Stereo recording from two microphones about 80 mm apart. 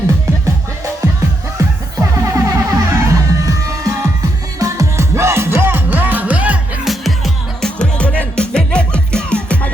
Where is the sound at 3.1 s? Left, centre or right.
Right; by 6.6 s centre.